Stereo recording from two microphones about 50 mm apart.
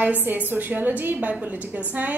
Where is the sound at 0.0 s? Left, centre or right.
Right.